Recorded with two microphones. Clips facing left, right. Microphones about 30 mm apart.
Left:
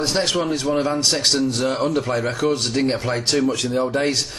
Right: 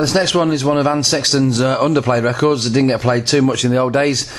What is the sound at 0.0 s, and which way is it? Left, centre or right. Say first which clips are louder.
A man's voice: right 6 dB; right.